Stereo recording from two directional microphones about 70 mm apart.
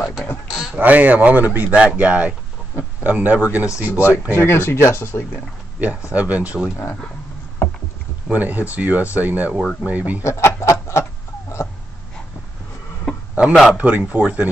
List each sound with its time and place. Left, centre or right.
0.5 s a sound: centre
0.7 s speech: right
4.3 s speech: left
5.8 s speech: right
8.3 s speech: right
10.2 s a sound: left
13.3 s a man's voice: centre